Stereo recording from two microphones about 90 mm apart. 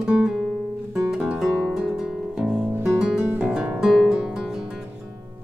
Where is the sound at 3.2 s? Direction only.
25° right (ahead or behind).